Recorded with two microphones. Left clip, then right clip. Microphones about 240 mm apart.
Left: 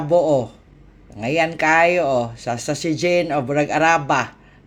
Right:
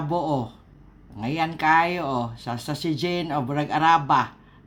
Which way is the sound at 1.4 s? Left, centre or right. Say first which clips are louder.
Left 4 dB; centre.